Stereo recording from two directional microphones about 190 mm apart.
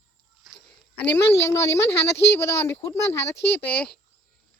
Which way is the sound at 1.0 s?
10° left (ahead or behind).